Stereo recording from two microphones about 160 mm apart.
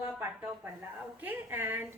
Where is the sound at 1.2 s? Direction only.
10° right (ahead or behind).